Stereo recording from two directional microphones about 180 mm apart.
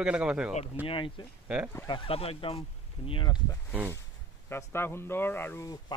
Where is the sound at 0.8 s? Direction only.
30° left (ahead or behind).